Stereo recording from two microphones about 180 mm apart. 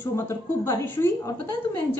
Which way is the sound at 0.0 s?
15° left (ahead or behind).